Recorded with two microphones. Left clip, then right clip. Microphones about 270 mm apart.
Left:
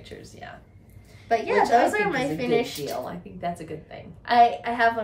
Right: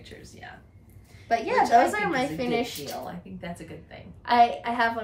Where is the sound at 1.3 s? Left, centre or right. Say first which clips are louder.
Left 1 dB; centre.